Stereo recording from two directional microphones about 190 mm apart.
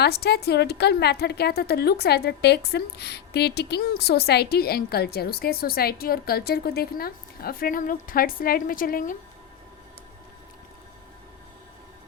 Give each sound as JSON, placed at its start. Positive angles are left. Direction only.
{"t": 0.0, "sound": "a woman's voice", "side_deg": 60}